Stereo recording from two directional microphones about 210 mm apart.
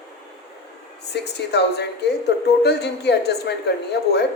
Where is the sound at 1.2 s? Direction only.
50° left (ahead or behind).